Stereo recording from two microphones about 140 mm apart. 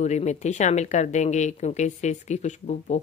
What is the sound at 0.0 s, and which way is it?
Speech, 55° left (ahead or behind).